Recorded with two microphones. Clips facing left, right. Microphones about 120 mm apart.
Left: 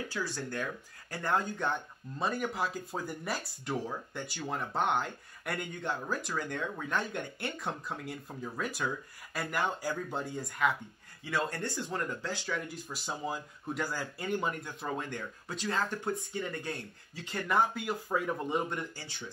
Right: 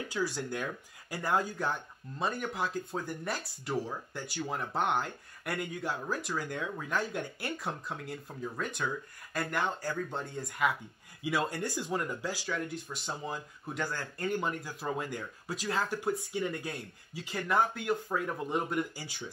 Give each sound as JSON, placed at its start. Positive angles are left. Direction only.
{"t": 0.1, "sound": "speech", "side_deg": -15}
{"t": 11.2, "sound": "speech", "side_deg": -10}